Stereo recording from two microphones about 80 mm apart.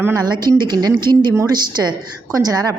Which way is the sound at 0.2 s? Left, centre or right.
Right.